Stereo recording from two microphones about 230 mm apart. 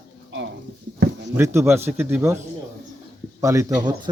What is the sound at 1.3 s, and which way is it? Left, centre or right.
Speech, centre.